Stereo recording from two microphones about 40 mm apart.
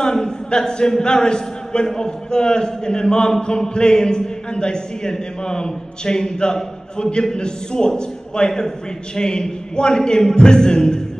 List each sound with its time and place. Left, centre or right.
0.0 s a man's voice: centre